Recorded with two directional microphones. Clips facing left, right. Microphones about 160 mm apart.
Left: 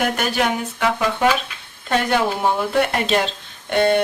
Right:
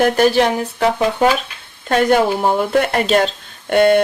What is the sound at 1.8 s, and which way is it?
Speech, 45° right (ahead or behind).